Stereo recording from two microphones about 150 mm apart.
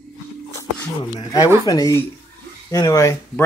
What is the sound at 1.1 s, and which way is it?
Speech, 25° left (ahead or behind).